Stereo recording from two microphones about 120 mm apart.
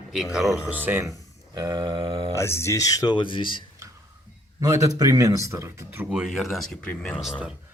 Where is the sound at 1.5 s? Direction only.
30° right (ahead or behind).